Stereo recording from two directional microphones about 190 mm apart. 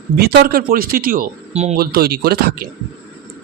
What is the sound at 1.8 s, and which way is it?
Speech, 55° right (ahead or behind).